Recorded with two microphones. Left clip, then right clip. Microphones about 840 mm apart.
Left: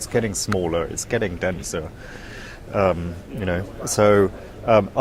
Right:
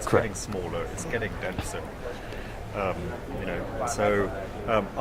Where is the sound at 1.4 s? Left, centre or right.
Left.